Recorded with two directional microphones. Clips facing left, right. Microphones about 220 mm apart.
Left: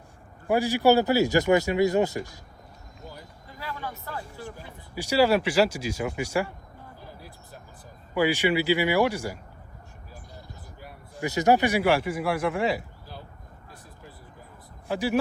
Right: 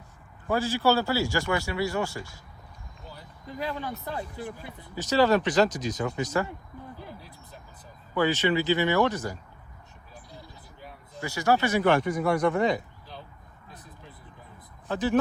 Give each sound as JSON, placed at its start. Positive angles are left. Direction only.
{"t": 0.4, "sound": "speech", "side_deg": 15}
{"t": 3.6, "sound": "speech", "side_deg": -20}
{"t": 4.9, "sound": "speech", "side_deg": 10}
{"t": 8.1, "sound": "speech", "side_deg": 10}
{"t": 10.8, "sound": "speech", "side_deg": 15}
{"t": 14.8, "sound": "speech", "side_deg": 10}